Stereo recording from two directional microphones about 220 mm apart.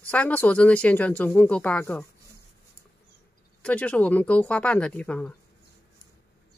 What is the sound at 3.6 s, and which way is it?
Speech, 5° left (ahead or behind).